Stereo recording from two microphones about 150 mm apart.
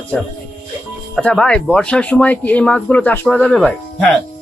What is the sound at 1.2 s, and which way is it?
Speech, 5° left (ahead or behind).